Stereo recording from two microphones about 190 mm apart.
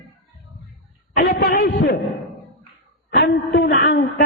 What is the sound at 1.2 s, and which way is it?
Speech, 55° left (ahead or behind).